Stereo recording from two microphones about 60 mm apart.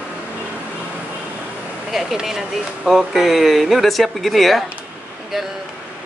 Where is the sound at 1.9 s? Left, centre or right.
Centre.